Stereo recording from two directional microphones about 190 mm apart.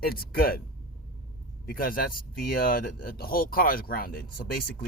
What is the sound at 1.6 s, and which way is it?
Speech, 50° left (ahead or behind).